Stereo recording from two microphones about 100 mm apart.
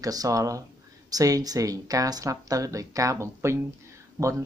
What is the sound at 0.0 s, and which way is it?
A woman's voice, 35° right (ahead or behind).